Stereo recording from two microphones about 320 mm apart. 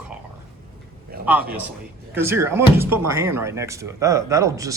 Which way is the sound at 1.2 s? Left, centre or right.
Centre.